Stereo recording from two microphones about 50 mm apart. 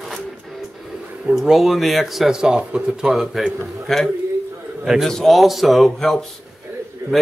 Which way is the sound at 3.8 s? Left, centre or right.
Centre.